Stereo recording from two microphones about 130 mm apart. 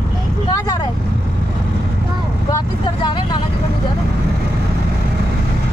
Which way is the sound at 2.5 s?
35° left (ahead or behind).